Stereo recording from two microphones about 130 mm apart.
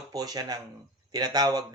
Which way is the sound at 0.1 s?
30° right (ahead or behind).